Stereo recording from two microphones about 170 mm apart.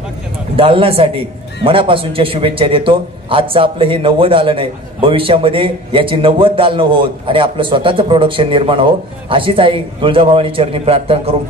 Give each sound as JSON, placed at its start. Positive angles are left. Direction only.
{"t": 0.6, "sound": "a man's voice", "side_deg": -35}